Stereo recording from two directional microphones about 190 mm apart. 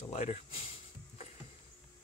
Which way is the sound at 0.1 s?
35° left (ahead or behind).